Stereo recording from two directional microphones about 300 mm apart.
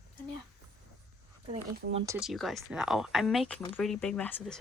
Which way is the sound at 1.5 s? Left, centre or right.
Right.